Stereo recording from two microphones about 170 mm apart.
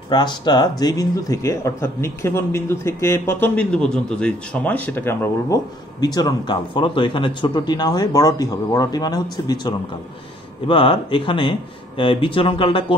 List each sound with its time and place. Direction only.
0.1 s speech: 25° left (ahead or behind)